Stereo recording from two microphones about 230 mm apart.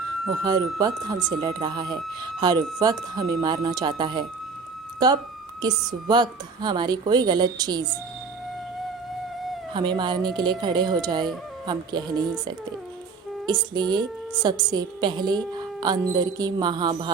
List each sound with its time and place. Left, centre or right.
0.3 s speech: centre
9.7 s speech: centre
13.5 s speech: centre